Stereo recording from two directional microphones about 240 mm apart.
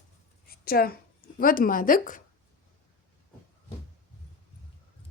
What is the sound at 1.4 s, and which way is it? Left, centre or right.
Speech, left.